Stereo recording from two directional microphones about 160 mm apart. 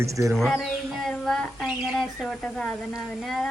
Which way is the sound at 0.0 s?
20° right (ahead or behind).